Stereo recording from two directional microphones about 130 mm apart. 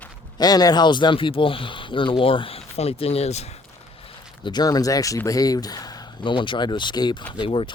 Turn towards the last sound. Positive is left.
turn(degrees=40)  # may be behind; listen again after turning